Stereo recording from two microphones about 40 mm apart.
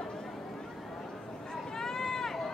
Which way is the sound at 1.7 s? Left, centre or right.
Centre.